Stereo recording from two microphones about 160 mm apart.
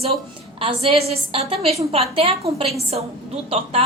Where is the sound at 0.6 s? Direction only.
35° right (ahead or behind).